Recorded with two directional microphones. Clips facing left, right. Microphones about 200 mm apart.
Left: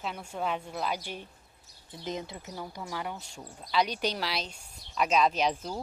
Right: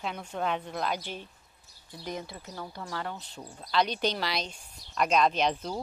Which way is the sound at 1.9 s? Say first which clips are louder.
Left 1 dB; 20° left (ahead or behind).